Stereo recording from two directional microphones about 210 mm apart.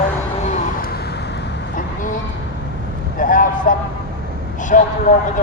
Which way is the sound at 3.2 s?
40° left (ahead or behind).